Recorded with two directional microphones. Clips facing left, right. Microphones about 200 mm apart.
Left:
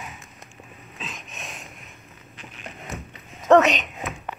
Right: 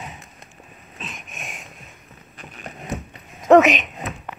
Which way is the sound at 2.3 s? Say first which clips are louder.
Right 3 dB; 55° right (ahead or behind).